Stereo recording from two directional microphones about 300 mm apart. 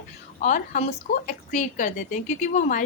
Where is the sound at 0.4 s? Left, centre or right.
Left.